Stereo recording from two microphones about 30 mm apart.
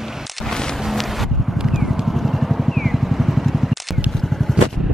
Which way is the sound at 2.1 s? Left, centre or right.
Centre.